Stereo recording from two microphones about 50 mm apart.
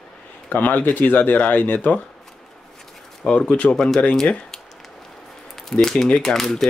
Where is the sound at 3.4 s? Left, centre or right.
Left.